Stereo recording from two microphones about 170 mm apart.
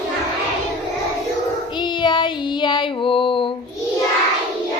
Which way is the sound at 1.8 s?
25° left (ahead or behind).